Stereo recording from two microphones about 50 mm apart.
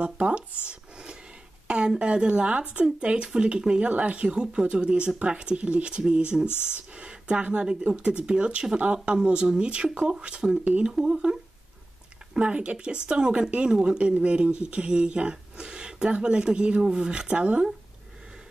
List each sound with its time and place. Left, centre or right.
0.0 s a sound: right
1.7 s speech: centre
10.9 s speech: centre
12.4 s speech: right